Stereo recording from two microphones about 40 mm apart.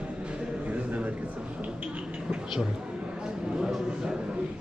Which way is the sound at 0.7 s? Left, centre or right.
Right.